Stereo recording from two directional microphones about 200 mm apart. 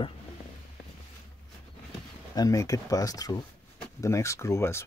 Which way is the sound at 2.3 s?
20° left (ahead or behind).